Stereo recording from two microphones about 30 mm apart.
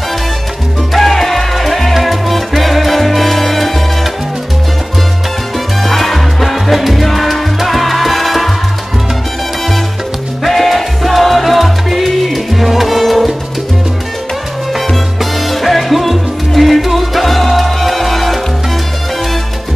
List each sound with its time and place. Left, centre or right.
0.9 s music: centre
2.0 s salsa music: centre
5.8 s salsa music: centre
10.4 s salsa music: centre
14.9 s music: centre